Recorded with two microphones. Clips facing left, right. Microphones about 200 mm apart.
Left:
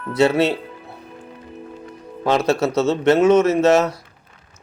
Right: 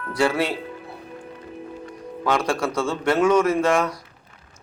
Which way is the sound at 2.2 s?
25° left (ahead or behind).